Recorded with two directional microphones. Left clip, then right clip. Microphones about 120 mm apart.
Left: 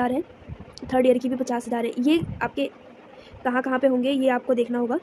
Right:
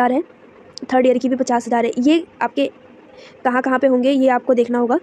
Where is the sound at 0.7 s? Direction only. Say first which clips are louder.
Right 5 dB; 20° right (ahead or behind).